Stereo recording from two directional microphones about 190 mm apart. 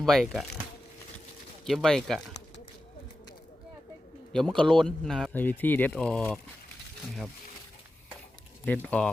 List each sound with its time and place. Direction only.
0.0 s speech: centre (ahead or behind)
1.6 s speech: centre (ahead or behind)
4.3 s speech: 5° left (ahead or behind)
8.6 s speech: 10° left (ahead or behind)